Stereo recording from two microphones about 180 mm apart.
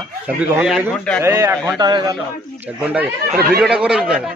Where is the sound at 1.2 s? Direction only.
15° right (ahead or behind).